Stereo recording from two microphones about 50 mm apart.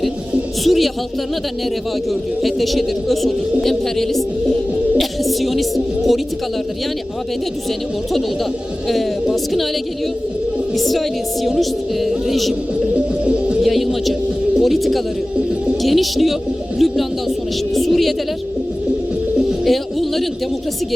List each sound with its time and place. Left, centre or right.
0.6 s speech: centre
2.4 s a woman's voice: centre
9.3 s a woman's voice: centre
10.8 s a woman's voice: centre
12.9 s music: right
13.6 s a woman's voice: centre
19.6 s bird: centre